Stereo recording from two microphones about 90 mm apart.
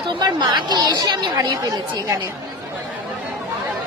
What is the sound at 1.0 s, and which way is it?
Speech, 45° right (ahead or behind).